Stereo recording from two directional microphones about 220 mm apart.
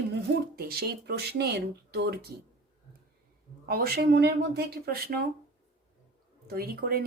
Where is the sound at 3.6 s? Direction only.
45° right (ahead or behind).